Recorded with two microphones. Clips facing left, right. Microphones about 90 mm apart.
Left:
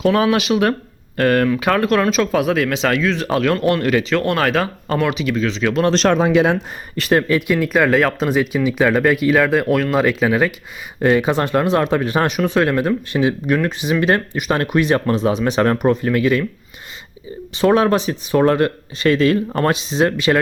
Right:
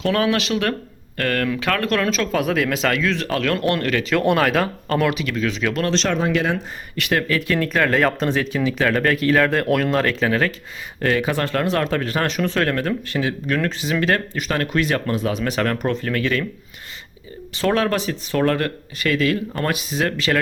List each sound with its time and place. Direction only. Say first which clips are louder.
0.0 s speech: left 4 dB; 10° left (ahead or behind)
3.2 s speech: left 4 dB; 20° left (ahead or behind)
3.5 s speech: left 3 dB; 5° left (ahead or behind)
4.1 s speech: even; 5° right (ahead or behind)
5.9 s speech: left 6 dB; 50° left (ahead or behind)
6.1 s speech: left 6 dB; 90° left
6.9 s speech: left 5 dB; 30° left (ahead or behind); by 10.0 s centre (ahead or behind)
10.0 s speech: left 4 dB; 10° left (ahead or behind)
17.6 s speech: left 5 dB; 20° left (ahead or behind)